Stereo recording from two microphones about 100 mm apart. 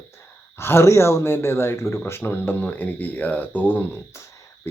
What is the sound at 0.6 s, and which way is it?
Speech, 25° left (ahead or behind).